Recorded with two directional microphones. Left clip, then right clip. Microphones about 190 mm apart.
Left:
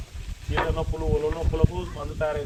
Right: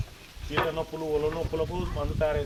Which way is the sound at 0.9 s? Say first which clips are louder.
Left 2 dB; 5° left (ahead or behind).